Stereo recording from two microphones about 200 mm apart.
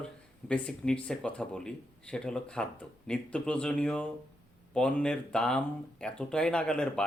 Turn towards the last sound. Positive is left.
turn(degrees=5)  # may be behind; listen again after turning